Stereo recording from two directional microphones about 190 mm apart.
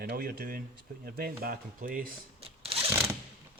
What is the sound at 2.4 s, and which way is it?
Shuffling cards, 30° right (ahead or behind).